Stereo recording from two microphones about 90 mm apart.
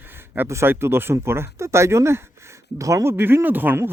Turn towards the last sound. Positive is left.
turn(degrees=-20)  # may be behind; listen again after turning